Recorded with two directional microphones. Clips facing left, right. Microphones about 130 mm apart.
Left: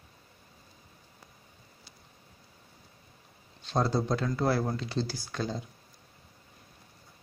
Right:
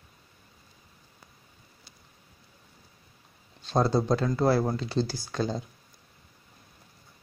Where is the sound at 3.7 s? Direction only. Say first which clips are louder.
Right 4 dB; 40° right (ahead or behind).